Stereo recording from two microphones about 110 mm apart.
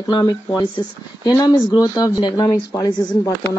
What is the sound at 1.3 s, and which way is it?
Speech, 35° left (ahead or behind).